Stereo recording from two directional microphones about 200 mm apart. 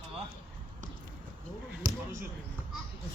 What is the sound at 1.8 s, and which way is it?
Basketball bounce, 40° right (ahead or behind).